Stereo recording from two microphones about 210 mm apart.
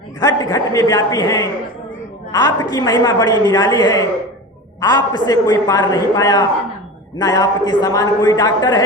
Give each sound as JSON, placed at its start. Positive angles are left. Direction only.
{"t": 0.2, "sound": "a man's voice", "side_deg": 15}